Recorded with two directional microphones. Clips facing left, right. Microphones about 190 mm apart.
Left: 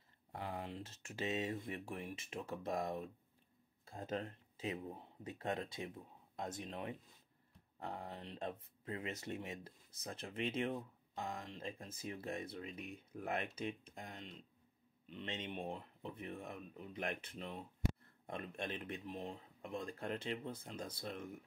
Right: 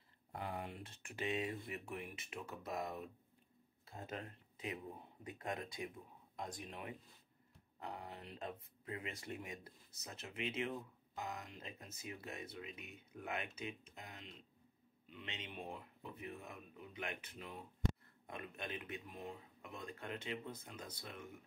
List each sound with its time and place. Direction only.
0.3 s speech: 30° left (ahead or behind)
15.4 s speech: 30° left (ahead or behind)